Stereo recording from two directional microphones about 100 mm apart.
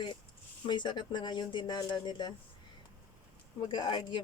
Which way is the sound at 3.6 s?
50° left (ahead or behind).